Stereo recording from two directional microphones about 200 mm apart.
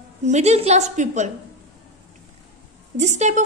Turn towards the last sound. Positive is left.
turn(degrees=-35)  # may be behind; listen again after turning